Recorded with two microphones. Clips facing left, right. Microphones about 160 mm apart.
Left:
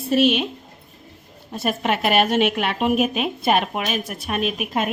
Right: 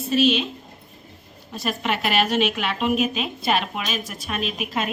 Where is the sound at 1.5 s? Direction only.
50° left (ahead or behind).